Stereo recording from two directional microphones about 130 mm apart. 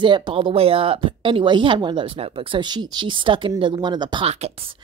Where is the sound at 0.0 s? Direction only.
40° right (ahead or behind).